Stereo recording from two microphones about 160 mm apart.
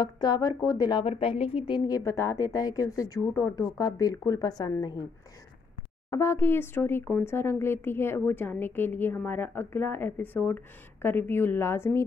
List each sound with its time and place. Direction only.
0.0 s speech: 25° left (ahead or behind)
1.0 s speech: 35° left (ahead or behind)
1.9 s speech: 20° left (ahead or behind)
6.0 s speech: 20° left (ahead or behind)